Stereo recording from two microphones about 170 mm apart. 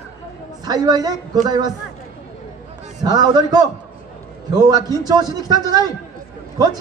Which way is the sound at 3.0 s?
25° right (ahead or behind).